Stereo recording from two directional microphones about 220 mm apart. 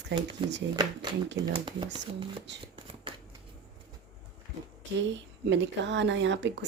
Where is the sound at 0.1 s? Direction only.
50° right (ahead or behind).